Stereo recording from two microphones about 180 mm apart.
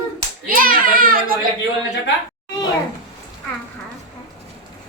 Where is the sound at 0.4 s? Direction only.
50° right (ahead or behind).